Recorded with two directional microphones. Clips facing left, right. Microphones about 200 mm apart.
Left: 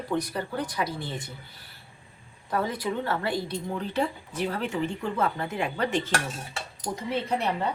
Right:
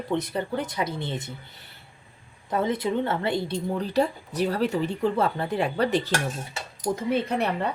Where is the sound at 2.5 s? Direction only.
20° right (ahead or behind).